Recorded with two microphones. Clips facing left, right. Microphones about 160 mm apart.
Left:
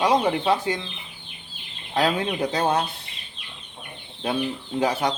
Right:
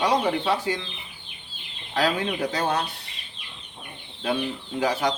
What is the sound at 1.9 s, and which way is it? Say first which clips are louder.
Speech: left 1 dB; 25° left (ahead or behind).